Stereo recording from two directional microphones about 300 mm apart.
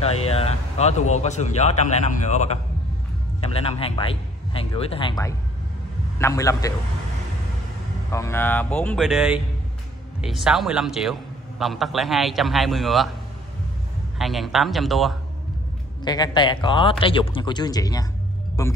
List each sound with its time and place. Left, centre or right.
0.0 s a man's voice: centre
8.1 s a man's voice: centre
14.1 s a man's voice: centre
16.0 s a man's voice: centre